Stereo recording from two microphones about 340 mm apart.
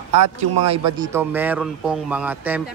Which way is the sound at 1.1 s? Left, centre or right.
Centre.